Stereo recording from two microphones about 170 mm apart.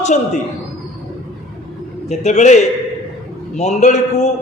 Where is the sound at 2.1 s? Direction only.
40° left (ahead or behind).